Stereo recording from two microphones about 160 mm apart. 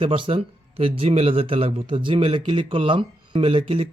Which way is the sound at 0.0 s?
35° right (ahead or behind).